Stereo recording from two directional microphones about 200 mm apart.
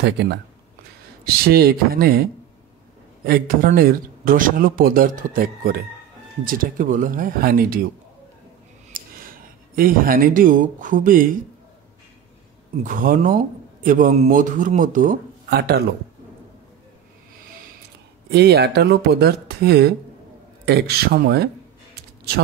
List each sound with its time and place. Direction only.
0.0 s speech: 60° right (ahead or behind)
3.3 s speech: 45° right (ahead or behind)
8.9 s scissors: 45° right (ahead or behind)
9.8 s speech: 45° right (ahead or behind)
12.8 s a man's voice: 40° right (ahead or behind)
18.3 s speech: 55° right (ahead or behind)